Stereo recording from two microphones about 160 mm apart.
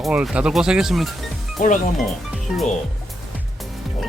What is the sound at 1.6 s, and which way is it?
Speech, 55° left (ahead or behind).